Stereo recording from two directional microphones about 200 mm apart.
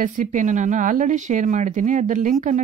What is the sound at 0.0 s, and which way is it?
Speech, 40° right (ahead or behind).